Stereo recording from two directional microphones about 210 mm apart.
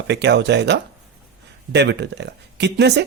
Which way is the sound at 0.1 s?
55° right (ahead or behind).